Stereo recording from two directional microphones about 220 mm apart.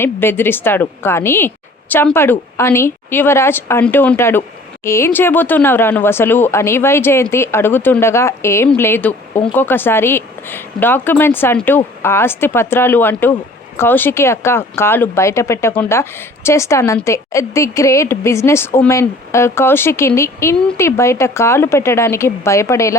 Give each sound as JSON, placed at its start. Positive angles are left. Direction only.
{"t": 0.0, "sound": "a woman's voice", "side_deg": 10}